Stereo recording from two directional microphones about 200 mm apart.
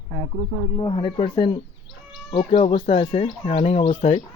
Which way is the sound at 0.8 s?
25° left (ahead or behind).